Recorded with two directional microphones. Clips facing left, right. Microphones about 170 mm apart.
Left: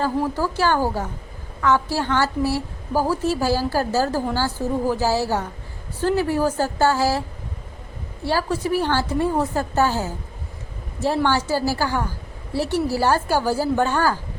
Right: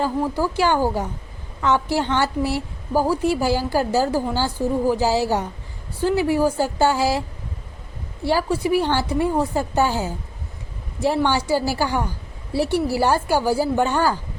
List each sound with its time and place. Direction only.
0.3 s a woman's voice: 15° right (ahead or behind)
8.2 s a woman's voice: 15° right (ahead or behind)